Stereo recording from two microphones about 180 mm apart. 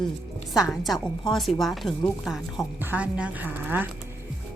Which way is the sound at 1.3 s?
Centre (ahead or behind).